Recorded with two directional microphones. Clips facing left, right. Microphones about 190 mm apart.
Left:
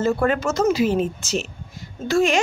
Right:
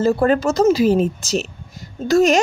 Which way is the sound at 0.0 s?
35° right (ahead or behind).